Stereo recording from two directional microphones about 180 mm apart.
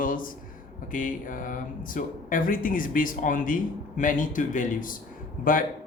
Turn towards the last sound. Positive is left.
turn(degrees=50)  # may be behind; listen again after turning